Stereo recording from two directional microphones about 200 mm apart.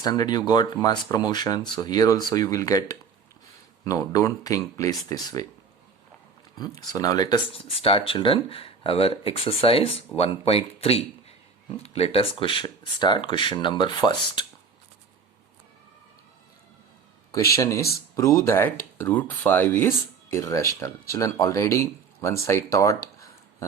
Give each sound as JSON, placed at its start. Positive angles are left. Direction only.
{"t": 0.0, "sound": "speech", "side_deg": 20}
{"t": 6.6, "sound": "speech", "side_deg": 20}
{"t": 17.6, "sound": "speech", "side_deg": 15}